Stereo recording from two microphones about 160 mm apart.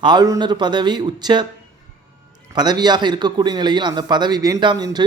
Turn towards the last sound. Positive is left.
turn(degrees=-25)  # may be behind; listen again after turning